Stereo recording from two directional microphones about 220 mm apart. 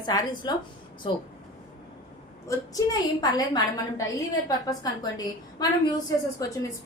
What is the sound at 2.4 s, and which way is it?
A woman's voice, 15° left (ahead or behind).